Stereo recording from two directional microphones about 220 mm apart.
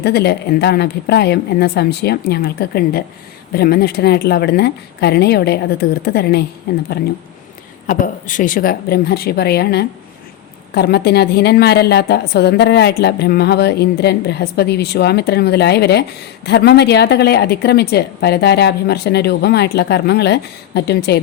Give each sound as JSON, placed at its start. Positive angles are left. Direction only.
{"t": 0.0, "sound": "a woman's voice", "side_deg": 45}
{"t": 7.9, "sound": "a woman's voice", "side_deg": 35}